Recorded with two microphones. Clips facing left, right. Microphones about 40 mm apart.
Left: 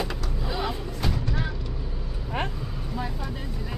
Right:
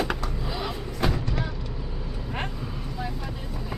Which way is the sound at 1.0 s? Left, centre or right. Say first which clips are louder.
Right 7 dB; right.